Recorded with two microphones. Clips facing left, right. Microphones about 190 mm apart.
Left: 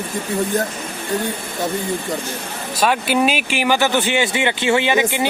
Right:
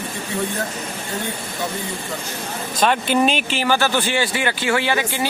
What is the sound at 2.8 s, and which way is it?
Speech, 5° left (ahead or behind).